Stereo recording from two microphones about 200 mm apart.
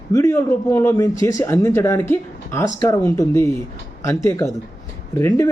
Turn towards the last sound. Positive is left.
turn(degrees=10)  # may be behind; listen again after turning